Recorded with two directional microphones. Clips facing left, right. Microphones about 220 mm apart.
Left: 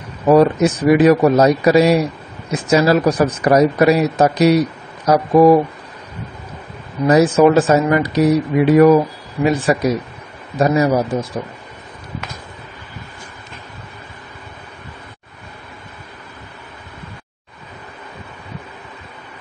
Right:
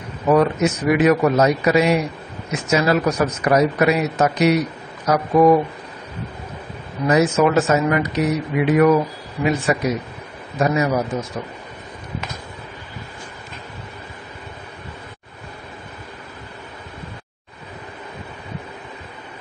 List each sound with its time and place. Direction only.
0.3 s a man's voice: 35° left (ahead or behind)
7.1 s a man's voice: 35° left (ahead or behind)